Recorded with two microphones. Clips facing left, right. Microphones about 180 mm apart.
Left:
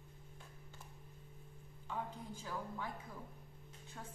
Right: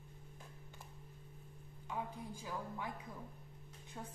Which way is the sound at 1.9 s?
10° right (ahead or behind).